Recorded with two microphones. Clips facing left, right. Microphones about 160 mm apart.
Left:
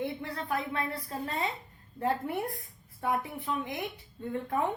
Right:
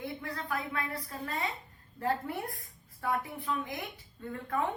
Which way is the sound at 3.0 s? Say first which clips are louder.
Left 2 dB; 20° left (ahead or behind).